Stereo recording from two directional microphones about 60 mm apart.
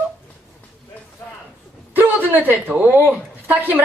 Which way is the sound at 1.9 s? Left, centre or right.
Right.